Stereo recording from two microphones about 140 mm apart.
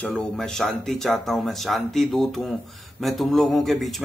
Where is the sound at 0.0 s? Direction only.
5° left (ahead or behind).